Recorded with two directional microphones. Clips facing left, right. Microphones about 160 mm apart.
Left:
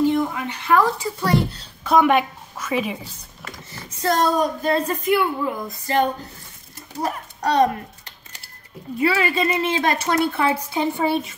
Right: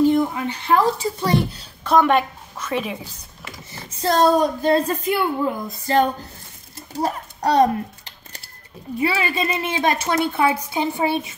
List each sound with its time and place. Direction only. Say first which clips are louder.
0.3 s a woman's voice: even; 30° right (ahead or behind)
1.9 s a woman's voice: even; 5° left (ahead or behind)
4.0 s a woman's voice: right 3 dB; 30° right (ahead or behind)
7.0 s typing: right 2 dB; 30° right (ahead or behind)
9.0 s a woman's voice: left 2 dB; 20° right (ahead or behind)